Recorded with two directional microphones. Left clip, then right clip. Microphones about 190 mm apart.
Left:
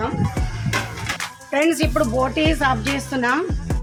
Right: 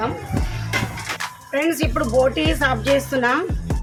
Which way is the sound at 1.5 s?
40° left (ahead or behind).